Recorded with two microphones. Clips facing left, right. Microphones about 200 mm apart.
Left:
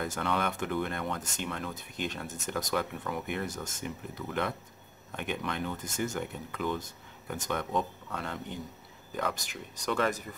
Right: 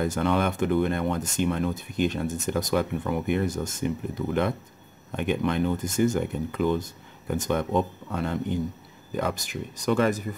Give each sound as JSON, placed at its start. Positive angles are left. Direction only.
{"t": 0.0, "sound": "speech", "side_deg": -25}
{"t": 1.2, "sound": "speech", "side_deg": -15}
{"t": 9.3, "sound": "speech", "side_deg": -10}